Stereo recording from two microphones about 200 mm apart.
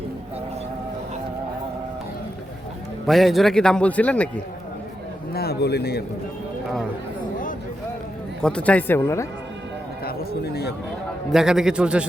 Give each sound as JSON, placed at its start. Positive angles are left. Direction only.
{"t": 3.1, "sound": "a man's voice", "side_deg": 0}
{"t": 5.3, "sound": "a man's voice", "side_deg": 50}
{"t": 8.4, "sound": "speech", "side_deg": 5}
{"t": 10.1, "sound": "a man's voice", "side_deg": 55}
{"t": 11.3, "sound": "a man's voice", "side_deg": -5}